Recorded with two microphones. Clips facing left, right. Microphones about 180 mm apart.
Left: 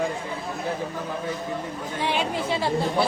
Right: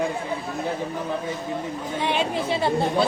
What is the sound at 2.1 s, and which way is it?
Speech, 25° right (ahead or behind).